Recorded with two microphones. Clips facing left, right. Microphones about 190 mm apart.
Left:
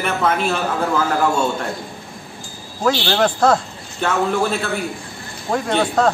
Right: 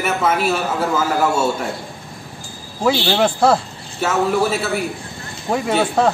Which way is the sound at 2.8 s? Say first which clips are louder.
Right 1 dB; 10° right (ahead or behind).